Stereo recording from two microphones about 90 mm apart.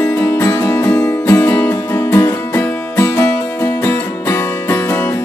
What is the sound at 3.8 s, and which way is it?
Music, 30° left (ahead or behind).